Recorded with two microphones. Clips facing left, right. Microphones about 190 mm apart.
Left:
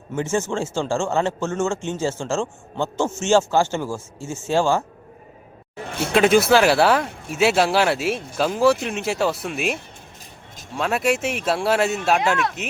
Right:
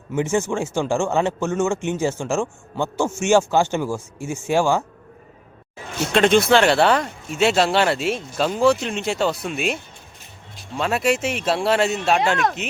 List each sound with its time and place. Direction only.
0.2 s speech: 15° right (ahead or behind)
5.9 s speech: 55° left (ahead or behind)
6.1 s speech: 5° left (ahead or behind)